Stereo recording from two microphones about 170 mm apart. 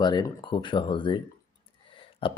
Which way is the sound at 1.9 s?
30° left (ahead or behind).